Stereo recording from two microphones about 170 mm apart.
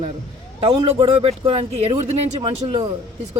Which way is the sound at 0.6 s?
35° right (ahead or behind).